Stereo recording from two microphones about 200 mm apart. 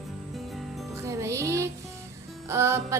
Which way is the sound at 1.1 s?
15° right (ahead or behind).